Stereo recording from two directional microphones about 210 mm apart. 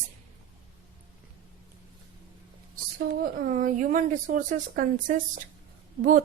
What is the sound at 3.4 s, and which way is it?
A woman's voice, 35° right (ahead or behind).